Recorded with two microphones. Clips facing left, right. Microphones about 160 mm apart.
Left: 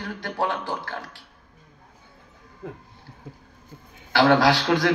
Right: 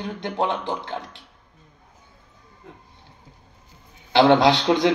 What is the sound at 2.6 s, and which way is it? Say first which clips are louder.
Speech: left 8 dB; 90° left.